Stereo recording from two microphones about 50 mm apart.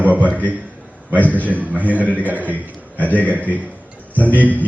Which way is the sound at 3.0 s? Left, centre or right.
Left.